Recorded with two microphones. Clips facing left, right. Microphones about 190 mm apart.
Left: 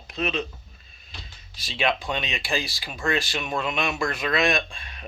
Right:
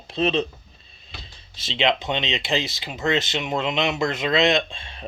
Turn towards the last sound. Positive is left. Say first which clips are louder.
# right 5 dB
turn(degrees=-25)  # may be behind; listen again after turning